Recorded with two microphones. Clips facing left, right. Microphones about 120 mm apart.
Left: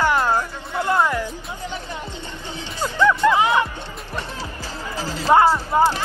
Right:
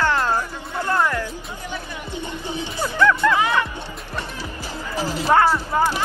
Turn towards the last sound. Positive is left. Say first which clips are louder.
# left 2 dB
turn(degrees=15)  # may be behind; listen again after turning